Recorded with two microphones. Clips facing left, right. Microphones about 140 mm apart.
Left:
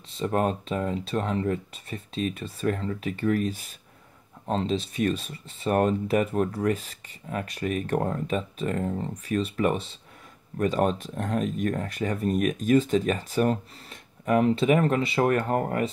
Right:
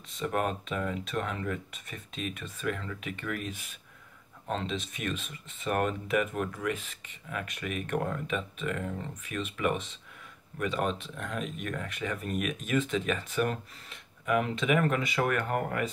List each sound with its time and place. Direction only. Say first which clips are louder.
0.1 s speech: left 5 dB; 35° left (ahead or behind)